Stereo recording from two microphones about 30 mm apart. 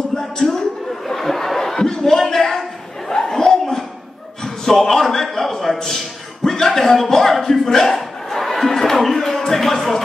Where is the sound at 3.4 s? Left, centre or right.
Centre.